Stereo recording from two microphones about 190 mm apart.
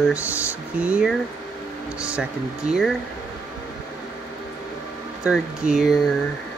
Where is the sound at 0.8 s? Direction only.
5° right (ahead or behind).